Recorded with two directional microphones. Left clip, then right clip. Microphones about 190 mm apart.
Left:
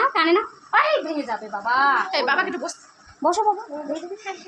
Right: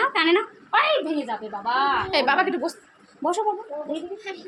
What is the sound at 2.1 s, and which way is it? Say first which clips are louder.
Speech: right 1 dB; 50° right (ahead or behind).